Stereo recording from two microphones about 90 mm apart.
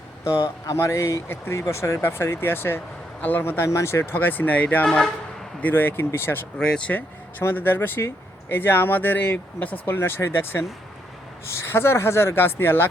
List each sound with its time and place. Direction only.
0.7 s speech: 35° left (ahead or behind); by 5.1 s 5° left (ahead or behind)
5.6 s speech: 20° left (ahead or behind)
6.6 s speech: 10° left (ahead or behind); by 12.9 s 25° left (ahead or behind)